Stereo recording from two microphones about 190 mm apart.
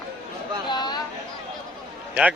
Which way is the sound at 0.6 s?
20° left (ahead or behind).